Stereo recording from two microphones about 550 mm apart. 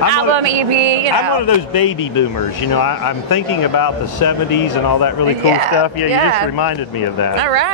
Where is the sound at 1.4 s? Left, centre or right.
Left.